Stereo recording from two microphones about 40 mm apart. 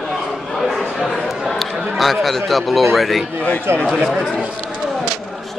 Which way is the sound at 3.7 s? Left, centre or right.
Right.